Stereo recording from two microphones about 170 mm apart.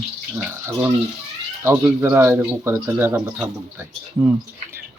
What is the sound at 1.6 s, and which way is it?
Speech, 15° right (ahead or behind).